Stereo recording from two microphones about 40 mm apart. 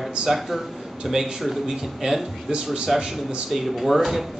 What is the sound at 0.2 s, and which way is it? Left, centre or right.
Speech, centre.